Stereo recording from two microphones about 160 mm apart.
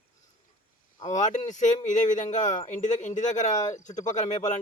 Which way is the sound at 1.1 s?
50° left (ahead or behind).